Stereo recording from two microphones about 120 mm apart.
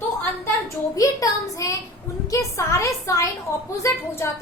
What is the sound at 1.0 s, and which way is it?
A woman's voice, 30° left (ahead or behind).